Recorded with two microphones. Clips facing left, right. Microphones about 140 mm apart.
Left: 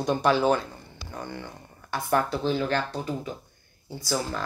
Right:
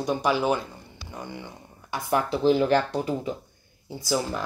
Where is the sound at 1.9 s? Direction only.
15° right (ahead or behind).